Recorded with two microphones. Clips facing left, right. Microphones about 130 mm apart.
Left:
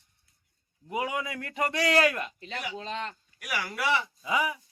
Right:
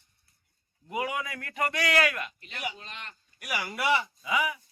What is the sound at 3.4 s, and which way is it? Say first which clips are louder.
Speech: right 1 dB; 5° right (ahead or behind).